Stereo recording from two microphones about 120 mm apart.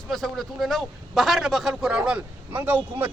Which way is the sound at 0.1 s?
Centre (ahead or behind).